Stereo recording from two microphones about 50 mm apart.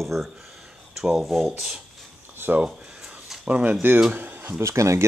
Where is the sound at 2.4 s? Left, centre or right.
Right.